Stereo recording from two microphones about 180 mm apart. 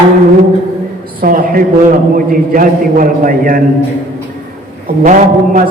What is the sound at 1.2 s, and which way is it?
A man's voice, 50° right (ahead or behind).